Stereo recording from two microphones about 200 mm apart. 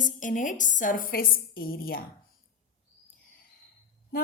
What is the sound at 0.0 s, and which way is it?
A woman's voice, 40° left (ahead or behind).